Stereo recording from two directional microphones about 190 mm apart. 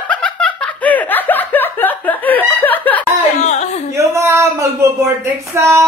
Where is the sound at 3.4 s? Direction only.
35° left (ahead or behind).